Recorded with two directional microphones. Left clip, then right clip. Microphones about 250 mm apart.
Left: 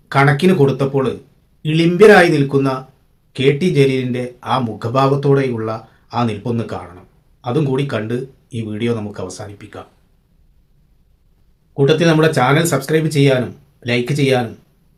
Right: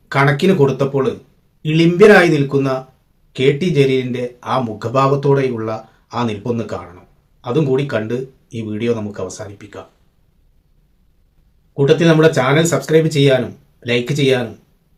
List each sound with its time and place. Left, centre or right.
0.1 s speech: centre
11.8 s speech: centre